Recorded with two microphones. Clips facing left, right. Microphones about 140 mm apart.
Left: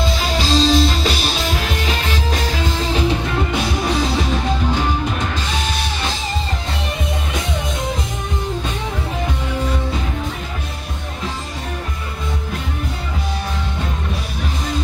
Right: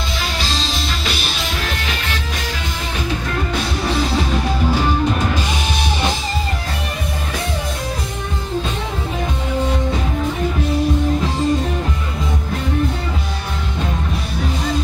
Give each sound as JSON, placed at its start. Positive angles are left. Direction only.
{"t": 0.6, "sound": "music", "side_deg": 40}